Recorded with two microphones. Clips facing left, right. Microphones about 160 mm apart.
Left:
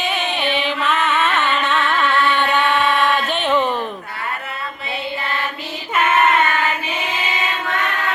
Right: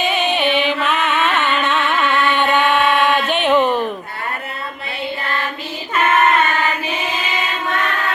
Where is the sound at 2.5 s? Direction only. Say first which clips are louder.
Right 2 dB; centre (ahead or behind).